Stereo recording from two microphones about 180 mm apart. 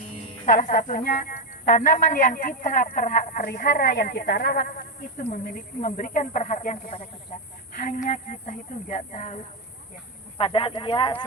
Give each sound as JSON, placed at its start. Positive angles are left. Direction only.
{"t": 0.4, "sound": "a man's voice", "side_deg": 45}
{"t": 5.1, "sound": "a man's voice", "side_deg": 45}
{"t": 10.3, "sound": "speech", "side_deg": 30}